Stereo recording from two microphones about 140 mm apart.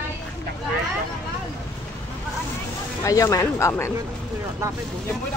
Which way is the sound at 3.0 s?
25° left (ahead or behind).